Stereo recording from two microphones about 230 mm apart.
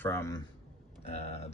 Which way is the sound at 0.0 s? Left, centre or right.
Centre.